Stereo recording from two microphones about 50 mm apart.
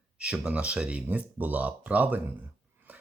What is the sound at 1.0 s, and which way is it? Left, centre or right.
Speech, right.